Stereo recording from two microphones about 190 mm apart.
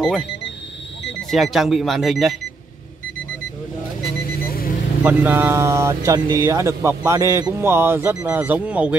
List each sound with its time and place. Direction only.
0.0 s speech: centre (ahead or behind)
1.3 s speech: centre (ahead or behind)
4.4 s vehicle: 50° left (ahead or behind)
5.0 s speech: 10° right (ahead or behind)